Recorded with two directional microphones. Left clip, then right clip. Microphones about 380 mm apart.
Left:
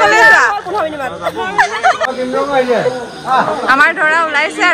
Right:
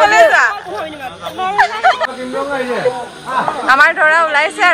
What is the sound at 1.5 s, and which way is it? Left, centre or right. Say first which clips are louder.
Speech: even; centre.